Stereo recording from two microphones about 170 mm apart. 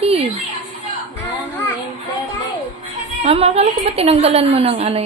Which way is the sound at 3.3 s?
35° right (ahead or behind).